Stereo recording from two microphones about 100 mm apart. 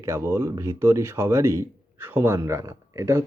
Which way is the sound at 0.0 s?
25° right (ahead or behind).